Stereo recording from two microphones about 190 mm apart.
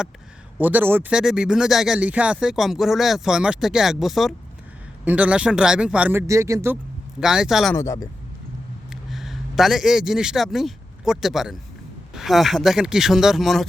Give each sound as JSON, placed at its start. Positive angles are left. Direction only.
{"t": 0.6, "sound": "speech", "side_deg": -10}
{"t": 7.2, "sound": "speech", "side_deg": -5}
{"t": 7.8, "sound": "speech", "side_deg": 15}
{"t": 8.9, "sound": "a man's voice", "side_deg": 0}